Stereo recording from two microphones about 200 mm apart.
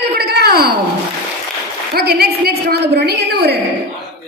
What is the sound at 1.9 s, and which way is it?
A woman's voice, 50° right (ahead or behind).